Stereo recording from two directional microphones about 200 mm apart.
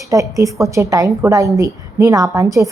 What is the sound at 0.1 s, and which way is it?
A woman's voice, 15° right (ahead or behind).